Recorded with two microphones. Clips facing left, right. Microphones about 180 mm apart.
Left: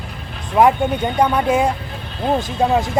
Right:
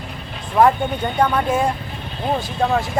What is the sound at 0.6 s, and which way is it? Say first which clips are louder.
Speech: left 2 dB; 15° left (ahead or behind).